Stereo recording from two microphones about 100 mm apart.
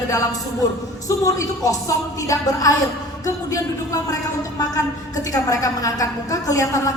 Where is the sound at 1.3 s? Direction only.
35° left (ahead or behind).